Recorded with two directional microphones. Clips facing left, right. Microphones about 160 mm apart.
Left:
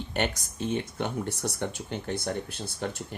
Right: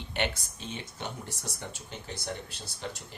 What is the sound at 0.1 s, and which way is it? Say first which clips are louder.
Speech: left 3 dB; 45° left (ahead or behind).